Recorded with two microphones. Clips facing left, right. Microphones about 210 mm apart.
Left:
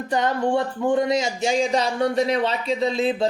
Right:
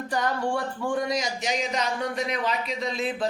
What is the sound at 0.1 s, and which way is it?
A woman's voice, 20° left (ahead or behind).